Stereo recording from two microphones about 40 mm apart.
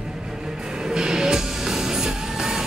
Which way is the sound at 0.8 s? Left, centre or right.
Centre.